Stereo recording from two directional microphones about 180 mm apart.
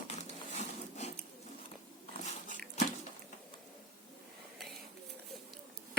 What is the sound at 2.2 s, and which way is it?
Biting, 40° left (ahead or behind).